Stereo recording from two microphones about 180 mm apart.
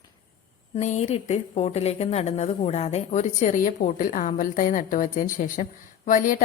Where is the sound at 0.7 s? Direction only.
40° left (ahead or behind).